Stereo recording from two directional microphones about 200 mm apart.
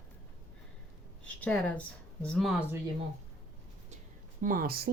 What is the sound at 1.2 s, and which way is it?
Speech, 5° left (ahead or behind).